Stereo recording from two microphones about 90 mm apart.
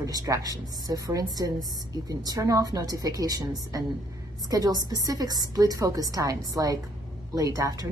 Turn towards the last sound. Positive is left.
turn(degrees=-40)  # may be behind; listen again after turning